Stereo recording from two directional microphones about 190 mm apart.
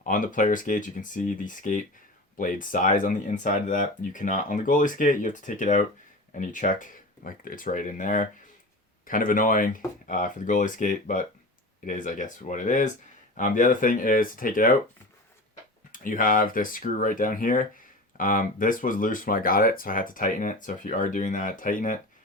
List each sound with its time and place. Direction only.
0.0 s speech: 45° left (ahead or behind)
15.9 s speech: 45° left (ahead or behind)